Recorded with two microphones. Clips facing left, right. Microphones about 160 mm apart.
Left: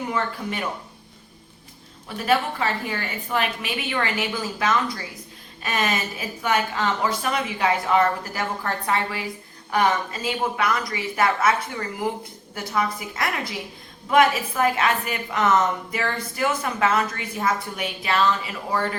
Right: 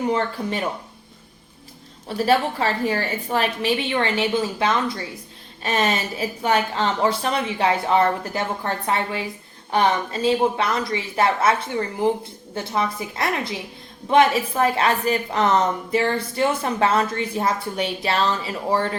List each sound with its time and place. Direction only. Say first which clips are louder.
2.0 s a woman's voice: right 3 dB; 35° right (ahead or behind)